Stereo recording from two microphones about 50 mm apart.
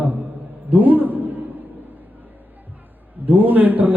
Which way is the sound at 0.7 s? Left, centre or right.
Right.